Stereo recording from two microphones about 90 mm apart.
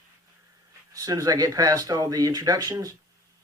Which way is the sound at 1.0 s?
40° right (ahead or behind).